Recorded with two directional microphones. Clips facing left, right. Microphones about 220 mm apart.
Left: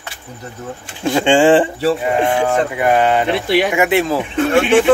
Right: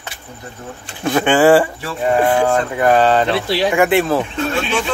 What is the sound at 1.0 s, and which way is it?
Speech, 25° left (ahead or behind).